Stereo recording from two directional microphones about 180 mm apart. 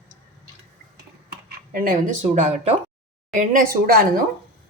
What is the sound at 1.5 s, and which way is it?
Speech, 50° right (ahead or behind).